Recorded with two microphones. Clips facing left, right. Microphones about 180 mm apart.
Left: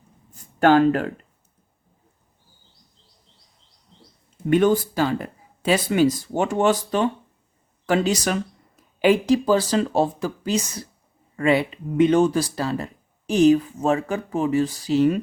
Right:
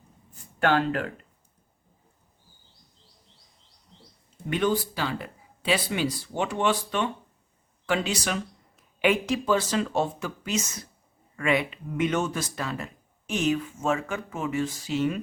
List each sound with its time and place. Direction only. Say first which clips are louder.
0.6 s speech: left 8 dB; 45° left (ahead or behind)
4.4 s speech: left 8 dB; 50° left (ahead or behind)